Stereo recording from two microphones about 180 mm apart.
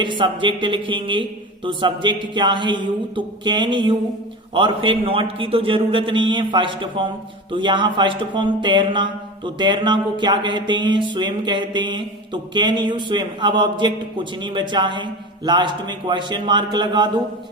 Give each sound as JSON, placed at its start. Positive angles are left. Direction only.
{"t": 0.0, "sound": "speech", "side_deg": -25}